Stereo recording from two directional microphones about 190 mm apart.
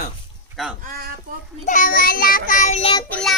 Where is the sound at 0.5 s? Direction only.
Centre (ahead or behind).